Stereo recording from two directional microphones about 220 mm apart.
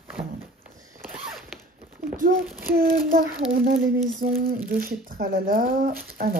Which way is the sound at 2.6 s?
40° right (ahead or behind).